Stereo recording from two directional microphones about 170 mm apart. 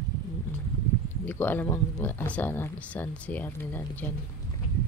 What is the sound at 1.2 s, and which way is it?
Speech, 10° left (ahead or behind).